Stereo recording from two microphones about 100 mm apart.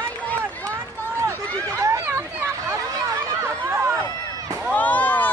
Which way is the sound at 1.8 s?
30° right (ahead or behind).